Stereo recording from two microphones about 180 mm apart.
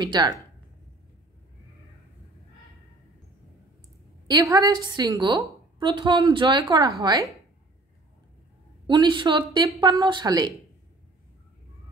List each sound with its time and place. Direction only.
0.0 s a woman's voice: 25° right (ahead or behind)
4.3 s a woman's voice: 20° right (ahead or behind)
8.8 s a woman's voice: 25° right (ahead or behind)